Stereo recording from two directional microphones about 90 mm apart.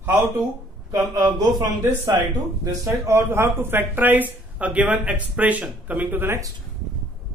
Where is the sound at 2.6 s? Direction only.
30° right (ahead or behind).